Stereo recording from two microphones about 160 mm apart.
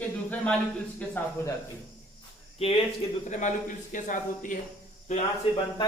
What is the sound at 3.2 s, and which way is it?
Speech, 50° left (ahead or behind).